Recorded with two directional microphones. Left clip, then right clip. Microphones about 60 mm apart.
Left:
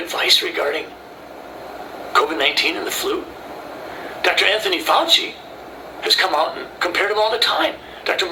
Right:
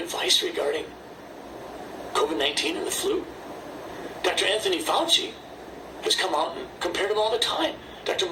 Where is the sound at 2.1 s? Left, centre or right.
Right.